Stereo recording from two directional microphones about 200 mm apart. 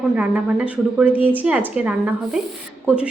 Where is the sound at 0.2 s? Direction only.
5° right (ahead or behind).